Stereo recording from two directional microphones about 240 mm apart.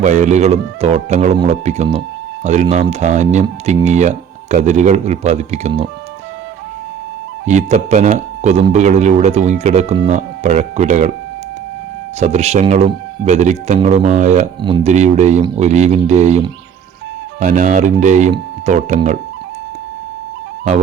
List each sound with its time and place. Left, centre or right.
0.0 s speech: right
7.4 s speech: right
12.2 s speech: right